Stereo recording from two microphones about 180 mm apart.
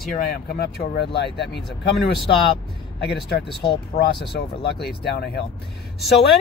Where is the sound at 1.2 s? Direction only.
65° left (ahead or behind).